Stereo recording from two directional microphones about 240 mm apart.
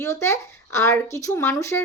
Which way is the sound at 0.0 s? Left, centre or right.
Centre.